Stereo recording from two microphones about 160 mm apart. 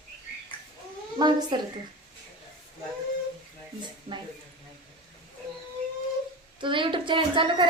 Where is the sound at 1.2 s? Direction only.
30° right (ahead or behind).